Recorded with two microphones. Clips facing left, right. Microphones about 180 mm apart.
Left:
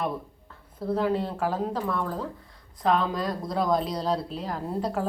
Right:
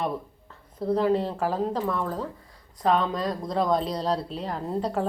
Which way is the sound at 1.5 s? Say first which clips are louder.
Right 2 dB; 5° left (ahead or behind).